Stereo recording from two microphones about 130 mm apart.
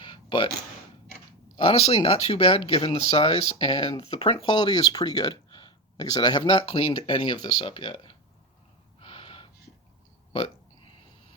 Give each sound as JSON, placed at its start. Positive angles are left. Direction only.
{"t": 0.0, "sound": "a sound", "side_deg": 35}
{"t": 1.5, "sound": "speech", "side_deg": 50}
{"t": 9.0, "sound": "gasp", "side_deg": 45}